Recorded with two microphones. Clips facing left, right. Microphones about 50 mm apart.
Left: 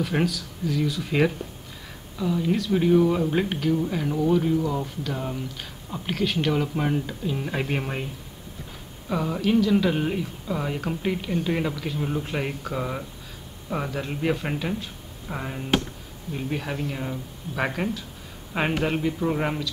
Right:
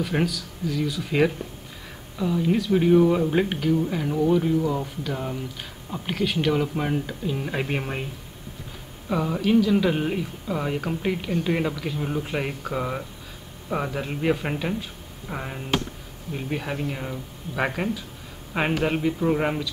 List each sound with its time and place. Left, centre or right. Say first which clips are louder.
0.0 s speech: even; centre
9.1 s speech: right 2 dB; centre